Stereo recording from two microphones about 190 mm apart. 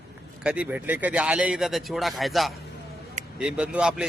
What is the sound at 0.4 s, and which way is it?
A man's voice, 5° right (ahead or behind).